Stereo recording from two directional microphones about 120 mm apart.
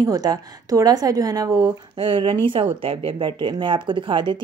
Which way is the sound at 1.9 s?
45° right (ahead or behind).